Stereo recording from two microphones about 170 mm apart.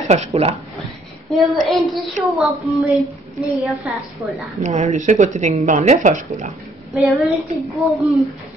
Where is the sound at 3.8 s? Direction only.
Centre (ahead or behind).